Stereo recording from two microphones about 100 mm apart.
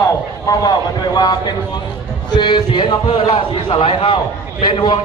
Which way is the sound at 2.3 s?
50° left (ahead or behind).